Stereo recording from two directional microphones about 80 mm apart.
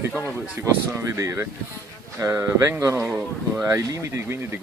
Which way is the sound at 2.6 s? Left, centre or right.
Right.